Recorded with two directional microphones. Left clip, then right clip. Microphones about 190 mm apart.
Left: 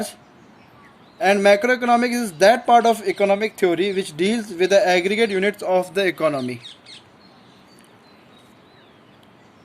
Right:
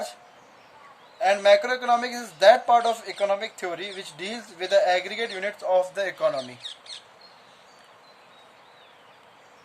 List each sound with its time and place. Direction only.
1.2 s speech: 40° left (ahead or behind)